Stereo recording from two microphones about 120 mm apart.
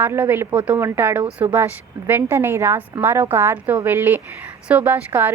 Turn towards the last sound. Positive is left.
turn(degrees=-15)  # may be behind; listen again after turning